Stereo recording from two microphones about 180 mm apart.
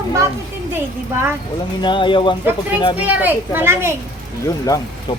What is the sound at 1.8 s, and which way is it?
Speech, 25° left (ahead or behind).